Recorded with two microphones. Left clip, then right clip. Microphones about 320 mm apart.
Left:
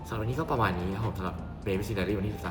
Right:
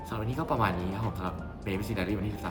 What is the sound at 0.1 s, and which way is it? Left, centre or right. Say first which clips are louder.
Speech: left 1 dB; centre.